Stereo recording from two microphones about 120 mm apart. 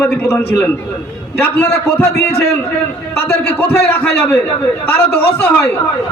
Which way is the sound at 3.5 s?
15° left (ahead or behind).